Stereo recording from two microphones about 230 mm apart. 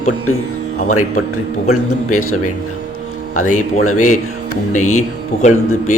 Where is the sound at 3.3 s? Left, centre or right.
Left.